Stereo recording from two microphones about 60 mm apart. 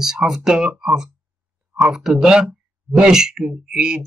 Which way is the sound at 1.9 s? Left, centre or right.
Centre.